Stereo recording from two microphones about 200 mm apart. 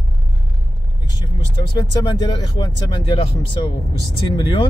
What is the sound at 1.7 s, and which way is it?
Speech, 20° left (ahead or behind).